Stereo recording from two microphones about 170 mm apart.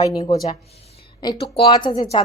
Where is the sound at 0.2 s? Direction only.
20° left (ahead or behind).